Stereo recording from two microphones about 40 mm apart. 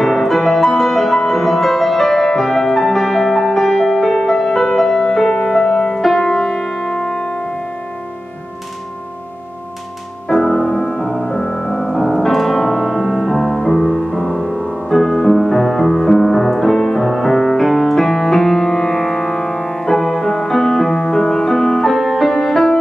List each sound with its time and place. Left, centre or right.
0.0 s music: centre; by 7.3 s left
10.2 s music: centre